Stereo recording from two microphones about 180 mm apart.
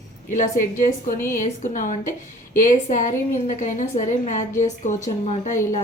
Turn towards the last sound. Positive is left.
turn(degrees=45)  # may be behind; listen again after turning